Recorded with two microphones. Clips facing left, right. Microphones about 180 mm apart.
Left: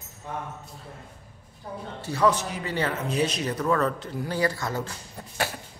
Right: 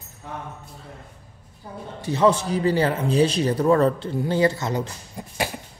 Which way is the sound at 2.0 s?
25° right (ahead or behind).